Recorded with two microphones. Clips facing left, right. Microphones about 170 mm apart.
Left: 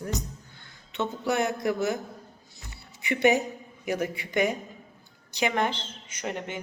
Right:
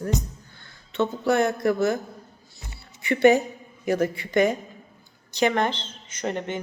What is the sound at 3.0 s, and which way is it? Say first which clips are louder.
Speech: right 5 dB; 15° left (ahead or behind).